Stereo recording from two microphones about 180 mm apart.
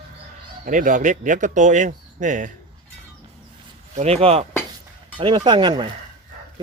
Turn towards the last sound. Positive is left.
turn(degrees=-25)  # may be behind; listen again after turning